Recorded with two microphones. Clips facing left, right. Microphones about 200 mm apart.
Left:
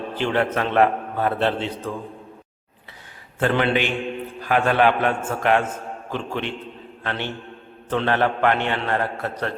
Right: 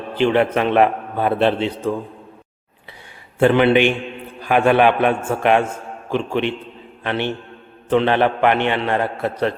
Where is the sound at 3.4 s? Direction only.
15° right (ahead or behind).